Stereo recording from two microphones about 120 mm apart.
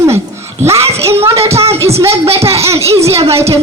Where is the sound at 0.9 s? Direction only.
55° right (ahead or behind).